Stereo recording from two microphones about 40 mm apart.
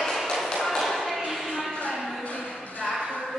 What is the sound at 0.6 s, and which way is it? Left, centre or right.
Thump, centre.